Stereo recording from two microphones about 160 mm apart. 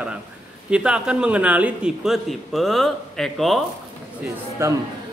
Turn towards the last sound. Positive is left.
turn(degrees=-15)  # may be behind; listen again after turning